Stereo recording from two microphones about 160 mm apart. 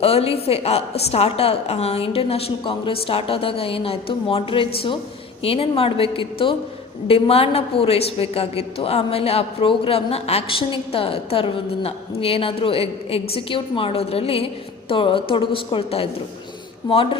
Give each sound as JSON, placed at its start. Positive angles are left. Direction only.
{"t": 0.0, "sound": "a woman's voice", "side_deg": 40}